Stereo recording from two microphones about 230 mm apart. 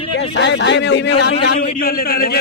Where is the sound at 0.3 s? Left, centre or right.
Left.